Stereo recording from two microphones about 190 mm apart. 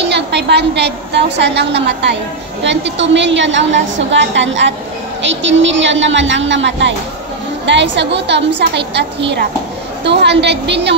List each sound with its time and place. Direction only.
0.0 s a woman's voice: 65° right (ahead or behind)
10.0 s a woman's voice: 65° right (ahead or behind)